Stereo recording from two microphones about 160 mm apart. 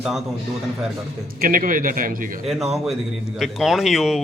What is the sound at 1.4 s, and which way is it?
Speech, 60° right (ahead or behind).